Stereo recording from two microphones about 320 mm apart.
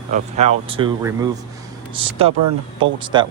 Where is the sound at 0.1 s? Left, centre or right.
Right.